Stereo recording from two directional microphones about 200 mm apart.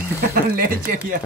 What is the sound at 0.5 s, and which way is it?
Speech, 45° right (ahead or behind).